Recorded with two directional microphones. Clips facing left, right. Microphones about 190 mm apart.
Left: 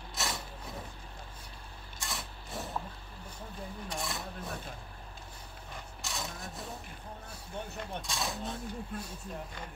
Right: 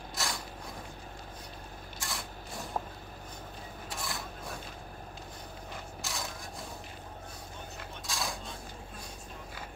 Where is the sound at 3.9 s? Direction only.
Centre (ahead or behind).